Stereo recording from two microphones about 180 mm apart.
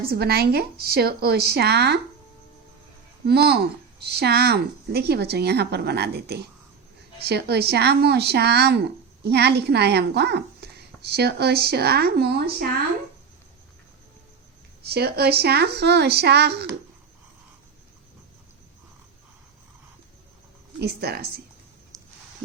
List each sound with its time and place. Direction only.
0.1 s speech: 60° right (ahead or behind)
3.2 s speech: 60° right (ahead or behind)
14.8 s speech: 60° right (ahead or behind)
20.7 s speech: 65° right (ahead or behind)
21.9 s a sound: 15° right (ahead or behind)